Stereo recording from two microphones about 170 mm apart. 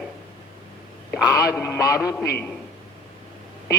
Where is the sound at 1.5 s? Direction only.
15° left (ahead or behind).